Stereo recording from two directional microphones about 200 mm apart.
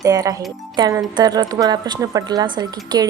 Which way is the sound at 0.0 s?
15° right (ahead or behind).